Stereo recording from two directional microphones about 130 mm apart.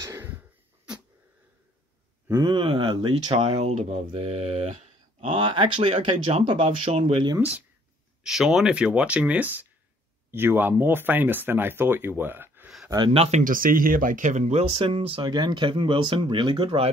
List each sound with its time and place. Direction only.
0.0 s a sound: 20° right (ahead or behind)
2.4 s speech: 40° right (ahead or behind)
3.3 s speech: 60° right (ahead or behind)
7.3 s speech: 10° right (ahead or behind)
13.1 s speech: 50° right (ahead or behind)
13.4 s speech: 90° right; by 16.9 s 45° right (ahead or behind)